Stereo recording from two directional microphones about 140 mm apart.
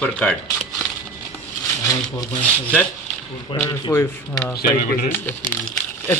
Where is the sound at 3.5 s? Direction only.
35° left (ahead or behind).